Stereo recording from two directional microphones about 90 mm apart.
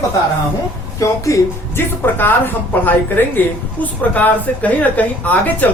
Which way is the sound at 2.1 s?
20° left (ahead or behind).